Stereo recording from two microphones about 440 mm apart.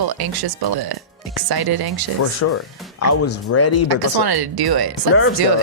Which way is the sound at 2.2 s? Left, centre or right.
Left.